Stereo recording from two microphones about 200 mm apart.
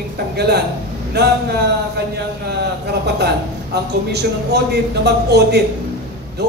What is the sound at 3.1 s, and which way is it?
A man's voice, 55° right (ahead or behind).